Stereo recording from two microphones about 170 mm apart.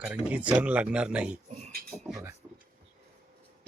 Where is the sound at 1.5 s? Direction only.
40° right (ahead or behind).